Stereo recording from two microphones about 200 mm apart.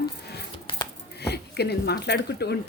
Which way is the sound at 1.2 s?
55° left (ahead or behind).